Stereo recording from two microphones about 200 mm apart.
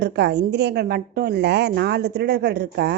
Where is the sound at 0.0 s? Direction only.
55° right (ahead or behind).